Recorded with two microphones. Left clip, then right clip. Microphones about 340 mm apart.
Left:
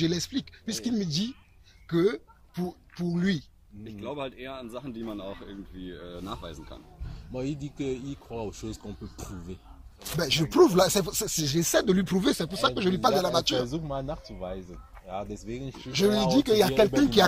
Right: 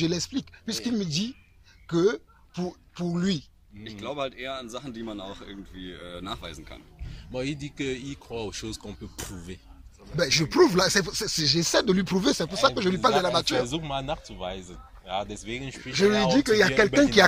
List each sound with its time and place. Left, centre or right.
0.0 s speech: centre
4.2 s a man's voice: centre
7.6 s a man's voice: right
10.1 s speech: centre
13.8 s speech: right
15.9 s speech: centre